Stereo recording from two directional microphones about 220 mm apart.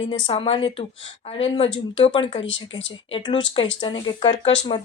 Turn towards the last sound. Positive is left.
turn(degrees=25)  # may be behind; listen again after turning